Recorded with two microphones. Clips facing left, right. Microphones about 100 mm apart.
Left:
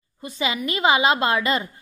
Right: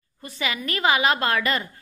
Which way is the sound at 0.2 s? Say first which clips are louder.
Left 4 dB; 20° left (ahead or behind).